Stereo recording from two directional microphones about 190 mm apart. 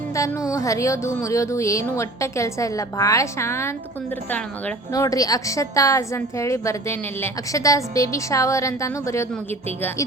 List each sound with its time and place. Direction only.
0.5 s a woman's voice: 15° left (ahead or behind)